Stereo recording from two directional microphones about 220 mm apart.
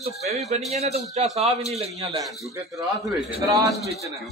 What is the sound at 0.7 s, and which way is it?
A man's voice, 30° right (ahead or behind).